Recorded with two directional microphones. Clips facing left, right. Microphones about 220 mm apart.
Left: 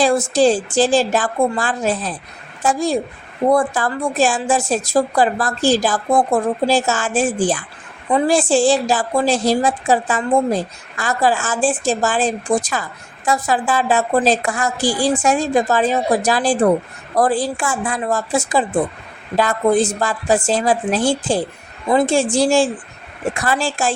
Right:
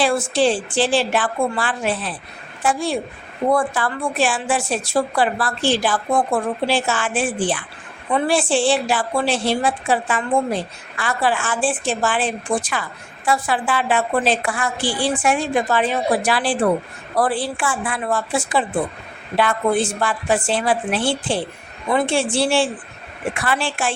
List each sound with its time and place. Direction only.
0.0 s a woman's voice: 40° left (ahead or behind)